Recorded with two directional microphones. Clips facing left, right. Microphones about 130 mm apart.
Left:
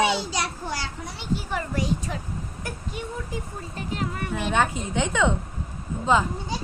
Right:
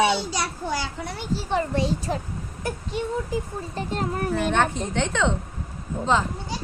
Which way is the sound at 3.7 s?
35° right (ahead or behind).